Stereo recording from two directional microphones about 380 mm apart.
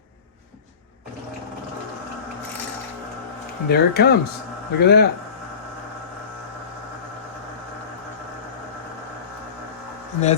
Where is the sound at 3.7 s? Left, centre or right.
Left.